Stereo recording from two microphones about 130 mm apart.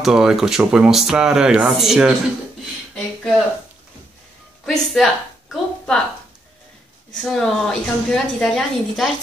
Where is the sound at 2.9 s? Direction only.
Centre (ahead or behind).